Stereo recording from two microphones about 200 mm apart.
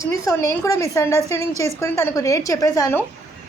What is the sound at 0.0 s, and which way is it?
A woman's voice, 15° left (ahead or behind).